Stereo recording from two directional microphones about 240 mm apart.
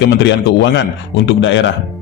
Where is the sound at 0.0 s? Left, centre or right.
Left.